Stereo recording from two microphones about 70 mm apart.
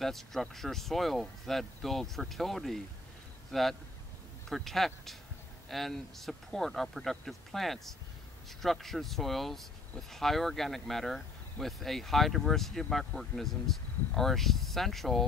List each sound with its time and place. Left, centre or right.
0.0 s speech: centre